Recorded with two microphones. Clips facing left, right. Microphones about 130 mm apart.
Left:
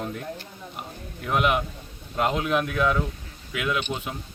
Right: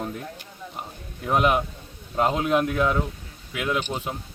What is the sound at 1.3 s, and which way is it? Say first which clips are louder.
A man's voice: right 2 dB; 35° right (ahead or behind).